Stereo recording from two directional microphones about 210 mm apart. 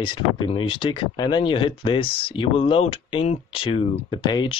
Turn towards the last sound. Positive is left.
turn(degrees=20)  # may be behind; listen again after turning